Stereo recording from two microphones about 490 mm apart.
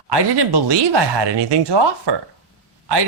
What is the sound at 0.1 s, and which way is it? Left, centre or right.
Speech, right.